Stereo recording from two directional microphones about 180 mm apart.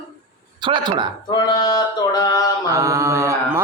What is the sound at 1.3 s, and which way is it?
Mantra, 20° left (ahead or behind).